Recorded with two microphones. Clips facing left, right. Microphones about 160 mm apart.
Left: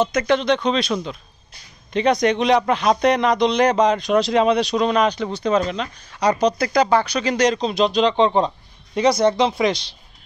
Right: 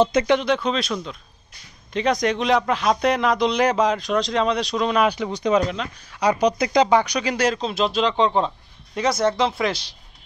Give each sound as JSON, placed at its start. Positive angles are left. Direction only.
{"t": 0.0, "sound": "speech", "side_deg": -25}
{"t": 0.3, "sound": "speech", "side_deg": -10}